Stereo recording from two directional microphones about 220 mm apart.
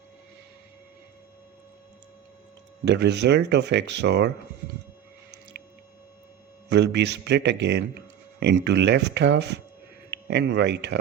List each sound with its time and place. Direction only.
2.8 s speech: 50° right (ahead or behind)
5.5 s squish: 50° right (ahead or behind)
6.7 s speech: 50° right (ahead or behind)